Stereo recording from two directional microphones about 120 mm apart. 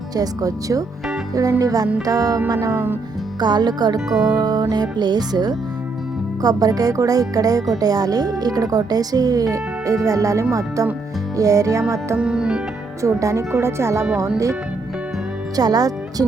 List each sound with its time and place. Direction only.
0.2 s speech: 30° right (ahead or behind)
2.6 s speech: 20° right (ahead or behind)
3.4 s speech: 35° right (ahead or behind)
12.1 s speech: 5° right (ahead or behind)
13.0 s speech: 25° right (ahead or behind)
15.5 s speech: 30° right (ahead or behind)